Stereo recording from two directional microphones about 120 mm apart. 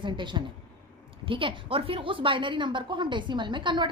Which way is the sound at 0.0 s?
40° right (ahead or behind).